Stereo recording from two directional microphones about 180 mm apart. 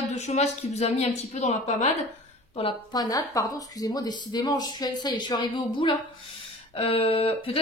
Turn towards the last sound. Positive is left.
turn(degrees=30)  # may be behind; listen again after turning